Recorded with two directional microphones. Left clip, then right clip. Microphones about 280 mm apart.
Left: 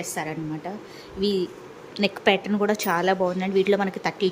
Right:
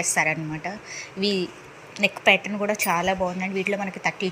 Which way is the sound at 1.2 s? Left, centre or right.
Right.